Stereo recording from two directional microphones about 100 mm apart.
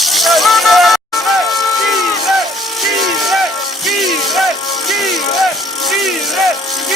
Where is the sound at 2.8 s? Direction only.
Centre (ahead or behind).